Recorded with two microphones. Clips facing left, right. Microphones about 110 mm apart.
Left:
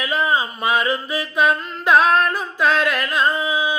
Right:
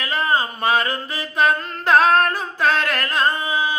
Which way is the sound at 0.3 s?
35° right (ahead or behind).